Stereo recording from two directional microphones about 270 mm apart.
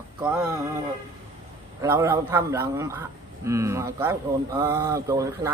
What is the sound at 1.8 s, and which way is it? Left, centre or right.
Speech, centre.